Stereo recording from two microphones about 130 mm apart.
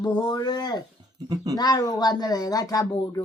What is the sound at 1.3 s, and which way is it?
Speech, 25° right (ahead or behind).